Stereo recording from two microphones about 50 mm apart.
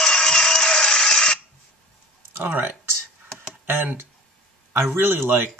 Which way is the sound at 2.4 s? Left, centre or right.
Right.